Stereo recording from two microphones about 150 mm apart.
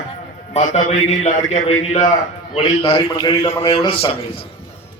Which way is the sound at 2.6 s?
35° left (ahead or behind).